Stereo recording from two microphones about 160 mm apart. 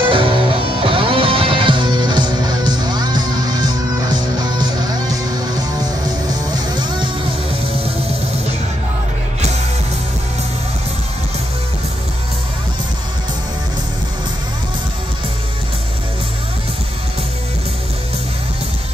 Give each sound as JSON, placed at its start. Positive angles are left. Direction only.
{"t": 0.1, "sound": "music", "side_deg": -35}
{"t": 6.0, "sound": "music", "side_deg": -25}